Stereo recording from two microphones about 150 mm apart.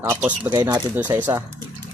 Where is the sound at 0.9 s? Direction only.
15° right (ahead or behind).